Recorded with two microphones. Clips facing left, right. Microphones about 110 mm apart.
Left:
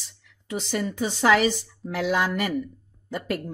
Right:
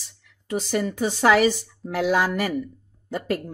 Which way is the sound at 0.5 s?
45° right (ahead or behind).